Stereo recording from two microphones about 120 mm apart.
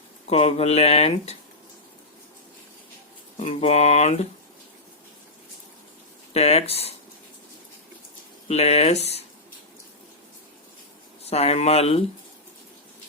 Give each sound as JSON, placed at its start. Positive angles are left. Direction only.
{"t": 0.3, "sound": "speech", "side_deg": 60}
{"t": 3.3, "sound": "speech", "side_deg": 55}
{"t": 6.3, "sound": "speech", "side_deg": 55}
{"t": 8.4, "sound": "speech", "side_deg": 60}
{"t": 11.3, "sound": "speech", "side_deg": 60}